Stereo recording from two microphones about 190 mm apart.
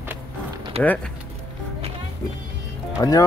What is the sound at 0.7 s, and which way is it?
Speech, 30° right (ahead or behind).